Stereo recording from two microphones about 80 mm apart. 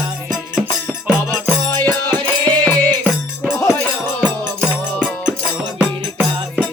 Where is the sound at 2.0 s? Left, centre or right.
Left.